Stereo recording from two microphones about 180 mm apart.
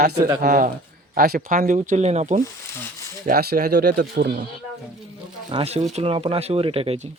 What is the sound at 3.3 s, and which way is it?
Speech, 60° right (ahead or behind).